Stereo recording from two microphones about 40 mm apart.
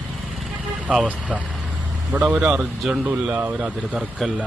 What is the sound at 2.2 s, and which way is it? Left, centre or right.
Speech, centre.